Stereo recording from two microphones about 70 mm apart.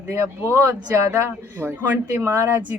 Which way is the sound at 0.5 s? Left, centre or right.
Right.